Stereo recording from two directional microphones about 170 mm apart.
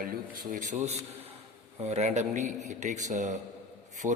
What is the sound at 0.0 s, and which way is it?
A man's voice, 55° right (ahead or behind).